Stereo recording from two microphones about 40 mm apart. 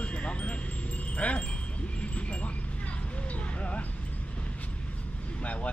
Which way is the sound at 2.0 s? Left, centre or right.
Left.